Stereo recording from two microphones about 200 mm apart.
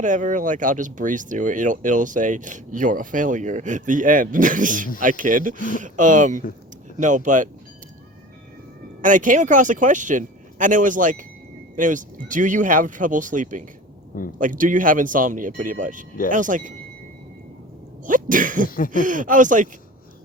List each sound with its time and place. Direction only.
0.0 s speech: 40° right (ahead or behind)
9.0 s speech: 40° right (ahead or behind)
18.0 s sneeze: 40° right (ahead or behind)
18.9 s speech: 40° right (ahead or behind)